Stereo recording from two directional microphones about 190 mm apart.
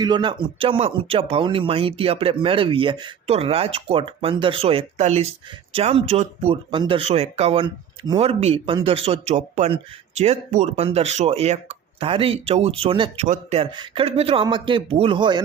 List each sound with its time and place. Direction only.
0.0 s speech: 25° right (ahead or behind)